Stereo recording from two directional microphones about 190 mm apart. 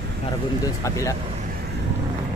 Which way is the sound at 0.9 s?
15° left (ahead or behind).